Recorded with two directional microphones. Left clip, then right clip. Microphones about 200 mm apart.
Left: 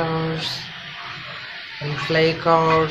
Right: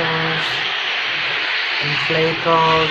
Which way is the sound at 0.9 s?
40° right (ahead or behind).